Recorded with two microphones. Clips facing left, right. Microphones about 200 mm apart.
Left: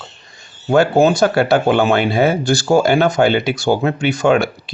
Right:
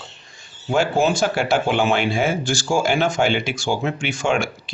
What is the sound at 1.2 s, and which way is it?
Speech, 60° left (ahead or behind).